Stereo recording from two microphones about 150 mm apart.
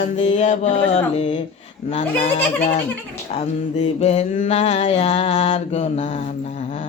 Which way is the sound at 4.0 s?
45° left (ahead or behind).